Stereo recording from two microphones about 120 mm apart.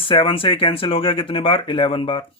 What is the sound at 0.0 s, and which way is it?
Speech, 50° left (ahead or behind).